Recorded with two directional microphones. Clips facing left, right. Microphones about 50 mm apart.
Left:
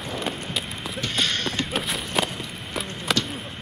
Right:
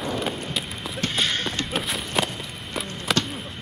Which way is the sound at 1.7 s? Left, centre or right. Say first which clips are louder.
Right 2 dB; centre.